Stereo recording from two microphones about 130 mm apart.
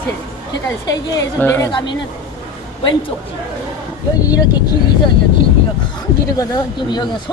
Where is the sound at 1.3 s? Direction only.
15° left (ahead or behind).